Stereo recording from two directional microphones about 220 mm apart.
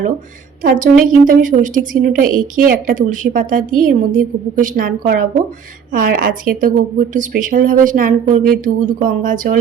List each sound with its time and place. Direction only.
0.6 s a woman's voice: 40° right (ahead or behind)